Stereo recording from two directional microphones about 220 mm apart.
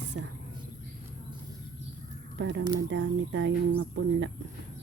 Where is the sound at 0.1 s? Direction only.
60° right (ahead or behind).